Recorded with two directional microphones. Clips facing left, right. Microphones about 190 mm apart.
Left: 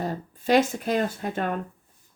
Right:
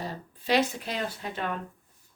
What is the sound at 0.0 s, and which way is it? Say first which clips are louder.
Speech: left 7 dB; 50° left (ahead or behind).